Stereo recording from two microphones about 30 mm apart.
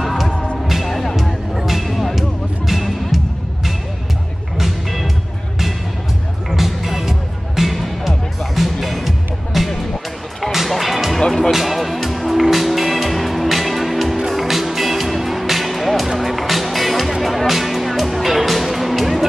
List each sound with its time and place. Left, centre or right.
0.0 s music: centre
0.3 s music: left
1.6 s music: centre
1.9 s music: centre
2.1 s music: centre
4.6 s music: centre
6.5 s music: centre
8.7 s music: centre